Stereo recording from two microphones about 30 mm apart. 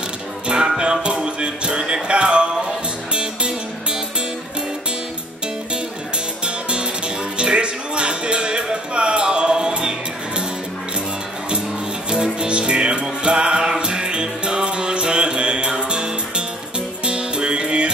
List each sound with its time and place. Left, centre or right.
0.5 s music: right
6.4 s music: right
12.4 s music: right